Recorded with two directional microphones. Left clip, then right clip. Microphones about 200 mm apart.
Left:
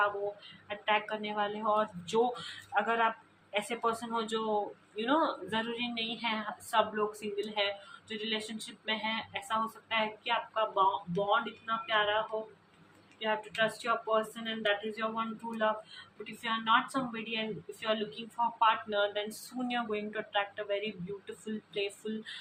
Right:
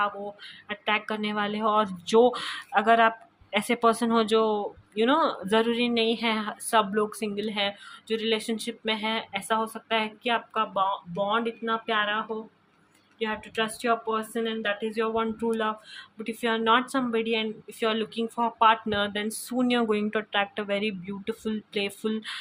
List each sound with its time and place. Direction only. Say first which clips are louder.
0.7 s a woman's voice: right 4 dB; 60° right (ahead or behind)